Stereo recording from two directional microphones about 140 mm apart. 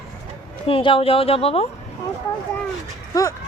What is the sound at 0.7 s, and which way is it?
Speech, 40° left (ahead or behind).